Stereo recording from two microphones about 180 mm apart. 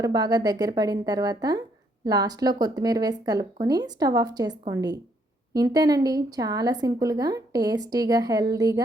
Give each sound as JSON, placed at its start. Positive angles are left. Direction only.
{"t": 0.0, "sound": "a woman's voice", "side_deg": -20}